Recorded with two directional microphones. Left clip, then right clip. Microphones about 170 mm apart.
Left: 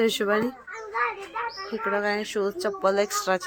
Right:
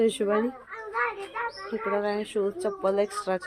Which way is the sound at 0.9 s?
40° left (ahead or behind).